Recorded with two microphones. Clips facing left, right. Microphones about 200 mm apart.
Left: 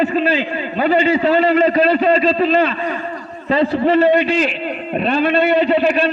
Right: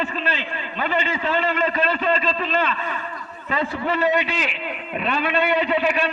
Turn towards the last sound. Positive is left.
turn(degrees=35)  # may be behind; listen again after turning